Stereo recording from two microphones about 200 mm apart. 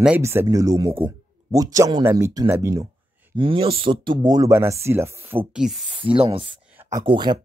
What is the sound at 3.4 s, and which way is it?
Speech, 25° right (ahead or behind).